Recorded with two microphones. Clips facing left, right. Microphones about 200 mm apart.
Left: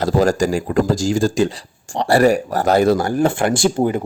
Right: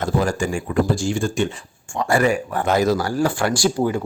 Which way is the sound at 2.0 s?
35° left (ahead or behind).